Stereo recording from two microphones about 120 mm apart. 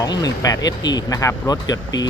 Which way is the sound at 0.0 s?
30° left (ahead or behind).